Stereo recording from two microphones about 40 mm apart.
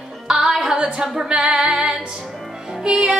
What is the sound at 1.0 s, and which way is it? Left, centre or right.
Speech, centre.